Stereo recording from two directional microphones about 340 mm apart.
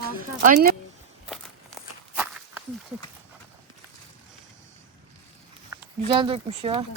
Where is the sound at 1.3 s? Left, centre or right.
Centre.